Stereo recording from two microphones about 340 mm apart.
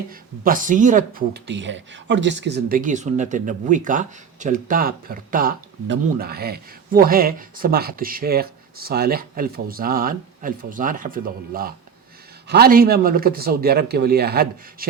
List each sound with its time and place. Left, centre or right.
0.1 s speech: right